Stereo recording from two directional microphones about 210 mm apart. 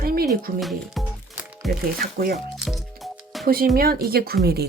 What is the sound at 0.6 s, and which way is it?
Music, centre (ahead or behind).